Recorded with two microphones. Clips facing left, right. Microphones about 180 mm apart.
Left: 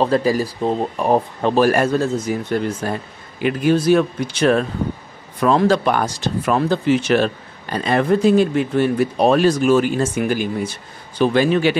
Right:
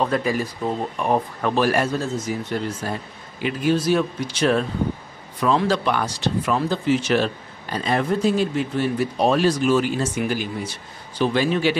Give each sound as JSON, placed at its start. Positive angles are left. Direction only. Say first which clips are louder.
{"t": 0.0, "sound": "speech", "louder": "left 5 dB", "side_deg": 35}